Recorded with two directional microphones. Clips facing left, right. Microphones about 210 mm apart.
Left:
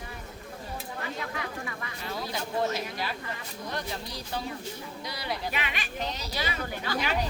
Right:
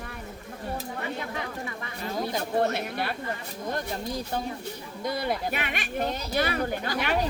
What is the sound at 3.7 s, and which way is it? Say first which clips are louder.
A woman's voice: right 5 dB; 50° right (ahead or behind).